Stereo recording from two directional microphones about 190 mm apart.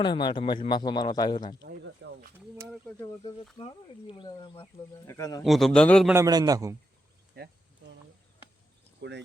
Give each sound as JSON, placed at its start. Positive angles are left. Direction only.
{"t": 0.0, "sound": "a man's voice", "side_deg": 25}
{"t": 1.6, "sound": "speech", "side_deg": -55}
{"t": 3.6, "sound": "a man's voice", "side_deg": 25}
{"t": 5.4, "sound": "a man's voice", "side_deg": 0}
{"t": 6.1, "sound": "a man's voice", "side_deg": -15}
{"t": 7.3, "sound": "speech", "side_deg": -55}
{"t": 9.0, "sound": "speech", "side_deg": -65}